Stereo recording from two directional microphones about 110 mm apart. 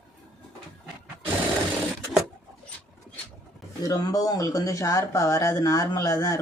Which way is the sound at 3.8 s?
35° left (ahead or behind).